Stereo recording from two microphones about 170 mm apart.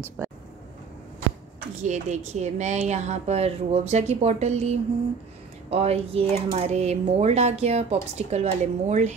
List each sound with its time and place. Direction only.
1.8 s speech: 45° right (ahead or behind)